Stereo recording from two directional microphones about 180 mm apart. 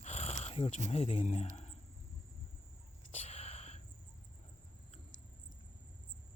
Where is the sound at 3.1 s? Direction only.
40° left (ahead or behind).